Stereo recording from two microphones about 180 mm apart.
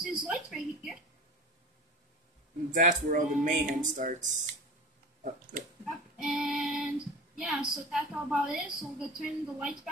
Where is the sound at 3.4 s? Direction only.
45° right (ahead or behind).